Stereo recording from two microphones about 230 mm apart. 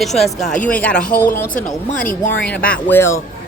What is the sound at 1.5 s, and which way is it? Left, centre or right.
Speech, left.